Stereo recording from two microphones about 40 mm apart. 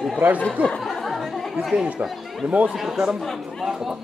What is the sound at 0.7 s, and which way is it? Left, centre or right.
Chatter, centre.